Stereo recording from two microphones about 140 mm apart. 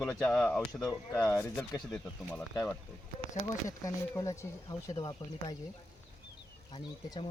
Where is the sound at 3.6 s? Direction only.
20° left (ahead or behind).